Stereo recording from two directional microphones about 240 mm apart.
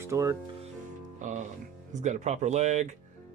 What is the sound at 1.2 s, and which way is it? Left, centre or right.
Speech, right.